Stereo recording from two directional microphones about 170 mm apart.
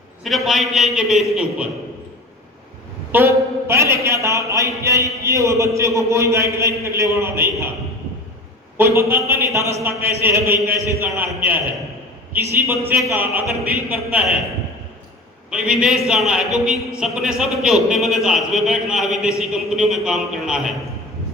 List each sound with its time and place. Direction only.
0.3 s a man's voice: centre (ahead or behind)
3.1 s a man's voice: 15° right (ahead or behind)
8.8 s a man's voice: 15° right (ahead or behind)
15.4 s a man's voice: 5° right (ahead or behind)